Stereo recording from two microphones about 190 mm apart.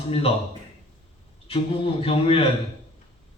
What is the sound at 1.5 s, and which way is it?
Speech, 30° left (ahead or behind).